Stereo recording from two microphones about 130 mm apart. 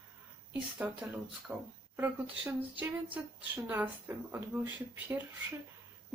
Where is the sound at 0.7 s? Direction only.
10° right (ahead or behind).